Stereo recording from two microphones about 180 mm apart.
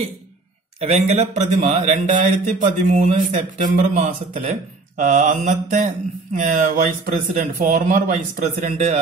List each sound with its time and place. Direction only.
0.7 s speech: 35° right (ahead or behind)